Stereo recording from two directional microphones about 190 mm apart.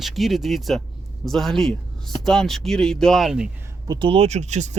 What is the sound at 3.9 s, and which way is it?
Speech, 25° right (ahead or behind).